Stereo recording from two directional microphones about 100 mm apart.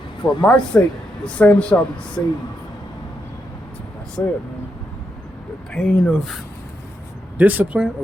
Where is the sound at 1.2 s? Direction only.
10° left (ahead or behind).